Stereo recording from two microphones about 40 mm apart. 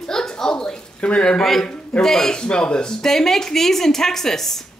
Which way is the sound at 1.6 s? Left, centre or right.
Left.